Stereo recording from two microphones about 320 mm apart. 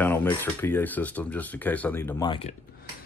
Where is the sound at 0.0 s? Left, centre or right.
Centre.